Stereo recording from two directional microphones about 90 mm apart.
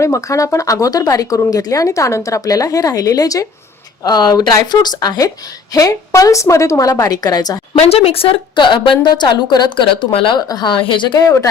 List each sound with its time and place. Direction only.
0.0 s speech: 35° left (ahead or behind)
7.9 s a woman's voice: 90° left
10.3 s speech: 50° left (ahead or behind)
10.8 s a woman's voice: 65° left (ahead or behind)